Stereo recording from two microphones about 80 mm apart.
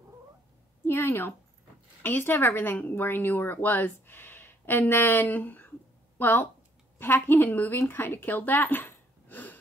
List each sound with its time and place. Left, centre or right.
0.8 s a woman's voice: left